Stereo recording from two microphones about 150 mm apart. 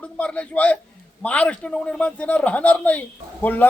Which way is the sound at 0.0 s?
10° left (ahead or behind).